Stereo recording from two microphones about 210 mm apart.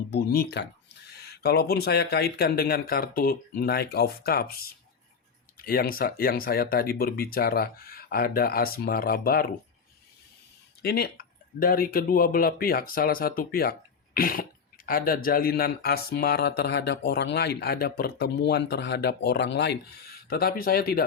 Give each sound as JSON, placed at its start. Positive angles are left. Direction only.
{"t": 0.1, "sound": "speech", "side_deg": 50}
{"t": 10.8, "sound": "speech", "side_deg": 45}